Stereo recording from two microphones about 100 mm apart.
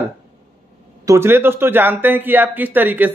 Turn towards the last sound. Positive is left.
turn(degrees=-20)  # may be behind; listen again after turning